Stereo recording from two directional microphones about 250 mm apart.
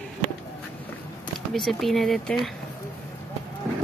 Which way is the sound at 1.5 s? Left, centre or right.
Centre.